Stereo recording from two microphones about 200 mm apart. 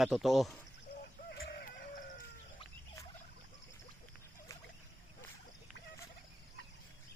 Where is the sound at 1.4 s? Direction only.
50° left (ahead or behind).